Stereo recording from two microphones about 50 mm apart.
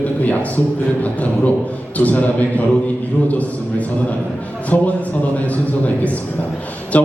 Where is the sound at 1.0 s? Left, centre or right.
Left.